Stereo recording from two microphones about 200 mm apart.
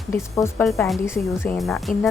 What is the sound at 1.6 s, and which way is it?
Speech, centre (ahead or behind).